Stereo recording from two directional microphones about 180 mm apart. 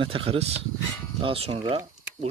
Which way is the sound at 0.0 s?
30° right (ahead or behind).